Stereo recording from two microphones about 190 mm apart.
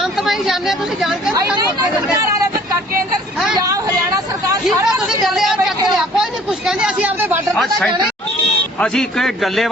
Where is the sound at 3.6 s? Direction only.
20° right (ahead or behind).